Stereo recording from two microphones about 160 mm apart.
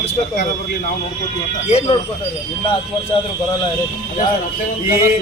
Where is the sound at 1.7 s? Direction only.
35° left (ahead or behind).